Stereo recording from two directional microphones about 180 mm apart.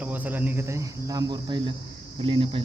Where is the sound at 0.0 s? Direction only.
10° right (ahead or behind).